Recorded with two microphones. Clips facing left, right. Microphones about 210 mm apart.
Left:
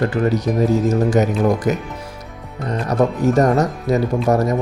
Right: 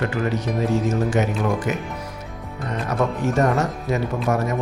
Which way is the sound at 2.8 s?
35° left (ahead or behind).